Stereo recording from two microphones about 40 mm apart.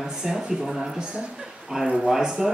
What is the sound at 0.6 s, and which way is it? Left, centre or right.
A woman's voice, centre.